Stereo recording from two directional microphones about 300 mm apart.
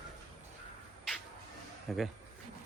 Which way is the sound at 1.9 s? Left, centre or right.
Centre.